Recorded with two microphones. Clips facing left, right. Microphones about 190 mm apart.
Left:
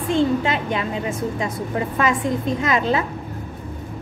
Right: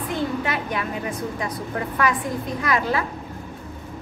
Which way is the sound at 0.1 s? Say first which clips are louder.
Left 7 dB; 25° left (ahead or behind).